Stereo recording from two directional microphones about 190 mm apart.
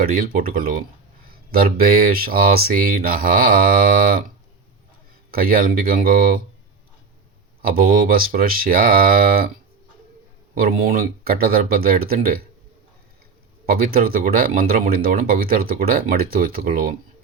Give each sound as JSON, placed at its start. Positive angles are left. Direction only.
{"t": 0.0, "sound": "speech", "side_deg": -50}
{"t": 5.3, "sound": "speech", "side_deg": -50}
{"t": 7.6, "sound": "speech", "side_deg": -50}
{"t": 10.6, "sound": "speech", "side_deg": -50}
{"t": 13.7, "sound": "speech", "side_deg": -50}